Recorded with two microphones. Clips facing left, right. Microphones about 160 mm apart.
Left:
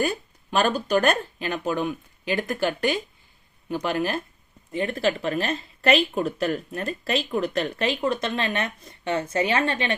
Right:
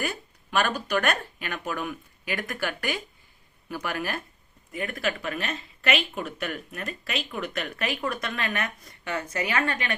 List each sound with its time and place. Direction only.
0.0 s speech: 30° left (ahead or behind)